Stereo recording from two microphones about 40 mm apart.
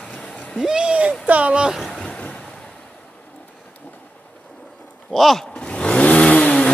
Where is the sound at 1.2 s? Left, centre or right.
Right.